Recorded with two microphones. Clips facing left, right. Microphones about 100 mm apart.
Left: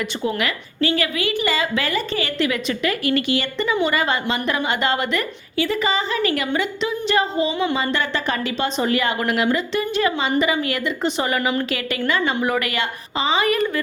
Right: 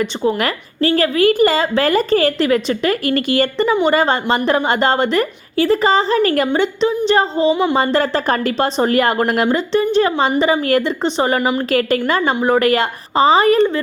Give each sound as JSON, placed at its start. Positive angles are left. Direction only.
{"t": 0.0, "sound": "a woman's voice", "side_deg": -35}
{"t": 9.6, "sound": "a woman's voice", "side_deg": -30}